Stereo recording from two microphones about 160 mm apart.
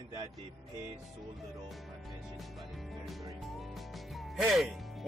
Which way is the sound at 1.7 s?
Centre (ahead or behind).